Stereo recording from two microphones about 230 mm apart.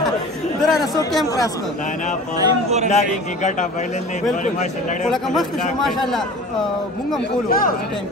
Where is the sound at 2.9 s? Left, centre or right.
Left.